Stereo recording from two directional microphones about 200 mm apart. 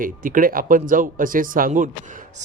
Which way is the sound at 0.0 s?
40° right (ahead or behind).